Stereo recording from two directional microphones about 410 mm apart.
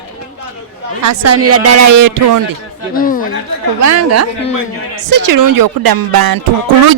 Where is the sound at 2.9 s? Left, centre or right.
Centre.